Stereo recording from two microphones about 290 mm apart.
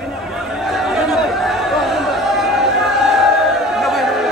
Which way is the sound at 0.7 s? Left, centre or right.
Centre.